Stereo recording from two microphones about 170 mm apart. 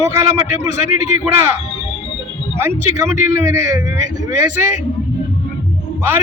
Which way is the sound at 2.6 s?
15° right (ahead or behind).